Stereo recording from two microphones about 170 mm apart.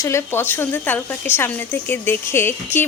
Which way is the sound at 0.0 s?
15° left (ahead or behind).